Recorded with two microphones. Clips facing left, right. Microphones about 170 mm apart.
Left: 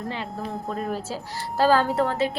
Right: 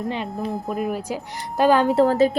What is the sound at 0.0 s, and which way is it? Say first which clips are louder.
Speech: right 5 dB; 20° right (ahead or behind).